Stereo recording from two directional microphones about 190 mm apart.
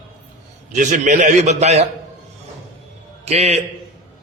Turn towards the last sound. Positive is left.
turn(degrees=-35)  # may be behind; listen again after turning